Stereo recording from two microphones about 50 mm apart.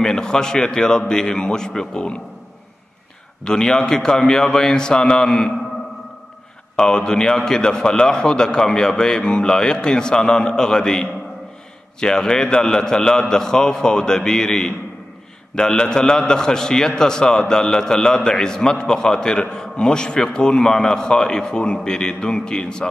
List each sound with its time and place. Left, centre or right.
0.0 s a man's voice: centre
3.4 s a man's voice: centre
6.8 s a man's voice: centre